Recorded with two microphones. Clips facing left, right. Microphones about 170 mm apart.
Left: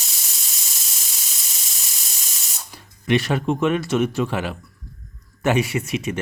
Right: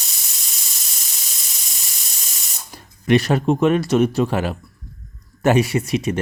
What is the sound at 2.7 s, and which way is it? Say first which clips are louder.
Speech: right 4 dB; 40° right (ahead or behind).